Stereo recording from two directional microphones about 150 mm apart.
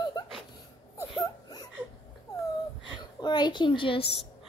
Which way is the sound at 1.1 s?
25° left (ahead or behind).